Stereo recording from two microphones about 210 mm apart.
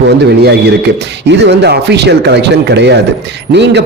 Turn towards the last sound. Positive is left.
turn(degrees=-55)  # may be behind; listen again after turning